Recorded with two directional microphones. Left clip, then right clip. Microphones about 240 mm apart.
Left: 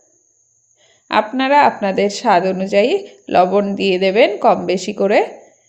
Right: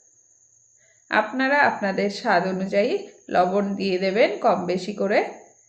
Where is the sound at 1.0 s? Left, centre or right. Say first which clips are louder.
Left 6 dB; left.